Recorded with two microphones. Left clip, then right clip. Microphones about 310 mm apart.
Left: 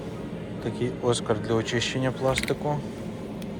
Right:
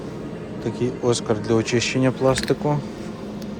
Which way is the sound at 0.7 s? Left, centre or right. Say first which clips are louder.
Right 4 dB; centre.